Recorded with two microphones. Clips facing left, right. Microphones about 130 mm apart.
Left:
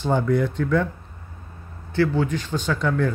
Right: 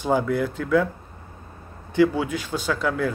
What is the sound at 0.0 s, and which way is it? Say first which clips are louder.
Speech: left 1 dB; 5° right (ahead or behind).